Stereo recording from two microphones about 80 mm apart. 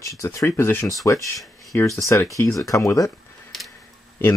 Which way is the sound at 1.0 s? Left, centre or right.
Left.